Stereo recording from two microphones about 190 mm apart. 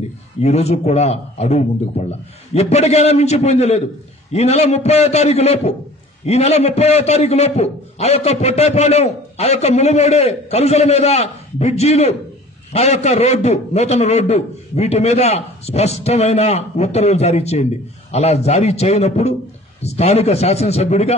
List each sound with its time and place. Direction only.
0.4 s a man's voice: 35° left (ahead or behind)